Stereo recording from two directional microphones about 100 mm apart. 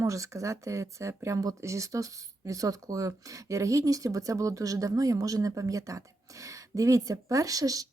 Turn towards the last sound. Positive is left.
turn(degrees=-35)  # may be behind; listen again after turning